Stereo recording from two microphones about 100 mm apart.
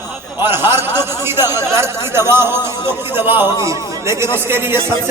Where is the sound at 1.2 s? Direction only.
25° right (ahead or behind).